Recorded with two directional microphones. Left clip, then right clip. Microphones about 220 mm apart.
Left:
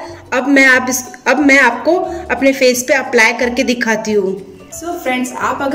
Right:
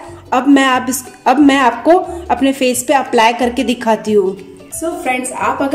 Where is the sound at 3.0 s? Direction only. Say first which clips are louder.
Even; 15° right (ahead or behind).